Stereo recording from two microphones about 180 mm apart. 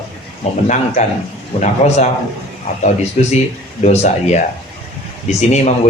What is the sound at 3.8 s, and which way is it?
Speech, 40° left (ahead or behind).